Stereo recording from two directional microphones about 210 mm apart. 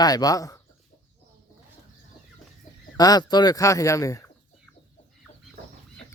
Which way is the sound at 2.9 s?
20° left (ahead or behind).